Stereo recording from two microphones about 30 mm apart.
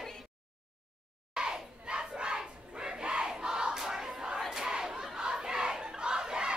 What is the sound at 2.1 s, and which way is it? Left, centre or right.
Battle cry, right.